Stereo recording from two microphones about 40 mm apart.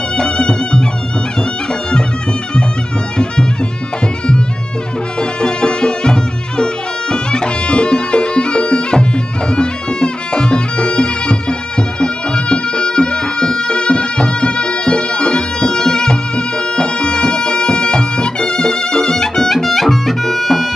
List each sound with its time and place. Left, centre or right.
0.2 s music: left
5.4 s music: left